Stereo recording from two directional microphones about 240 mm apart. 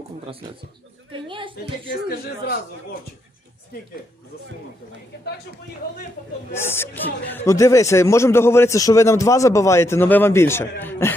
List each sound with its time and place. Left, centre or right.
1.1 s a woman's voice: right
1.9 s speech: left
6.5 s speech: centre